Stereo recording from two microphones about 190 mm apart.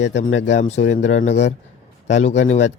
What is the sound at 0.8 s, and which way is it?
Speech, 70° left (ahead or behind).